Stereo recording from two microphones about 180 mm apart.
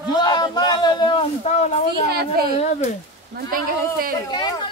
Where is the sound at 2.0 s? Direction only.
60° right (ahead or behind).